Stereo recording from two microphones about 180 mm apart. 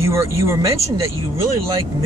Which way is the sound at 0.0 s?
15° right (ahead or behind).